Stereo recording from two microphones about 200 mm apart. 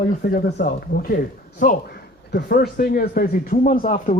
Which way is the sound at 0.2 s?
55° left (ahead or behind).